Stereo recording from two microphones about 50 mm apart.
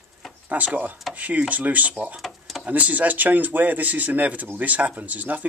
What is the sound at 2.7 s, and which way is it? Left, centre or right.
Speech, right.